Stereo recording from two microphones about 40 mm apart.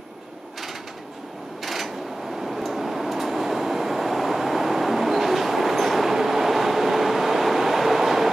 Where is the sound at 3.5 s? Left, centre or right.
Centre.